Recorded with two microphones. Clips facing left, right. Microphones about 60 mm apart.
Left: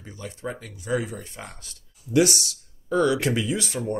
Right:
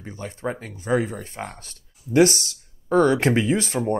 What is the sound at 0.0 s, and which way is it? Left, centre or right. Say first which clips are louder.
Speech: right 4 dB; right.